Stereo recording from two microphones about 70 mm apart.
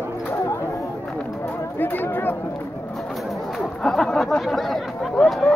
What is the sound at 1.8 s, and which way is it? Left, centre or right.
Speech, left.